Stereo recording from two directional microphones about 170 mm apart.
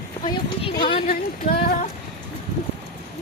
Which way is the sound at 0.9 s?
35° left (ahead or behind).